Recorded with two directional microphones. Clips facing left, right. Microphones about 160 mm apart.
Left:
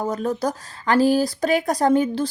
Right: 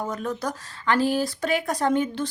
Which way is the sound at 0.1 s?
35° left (ahead or behind).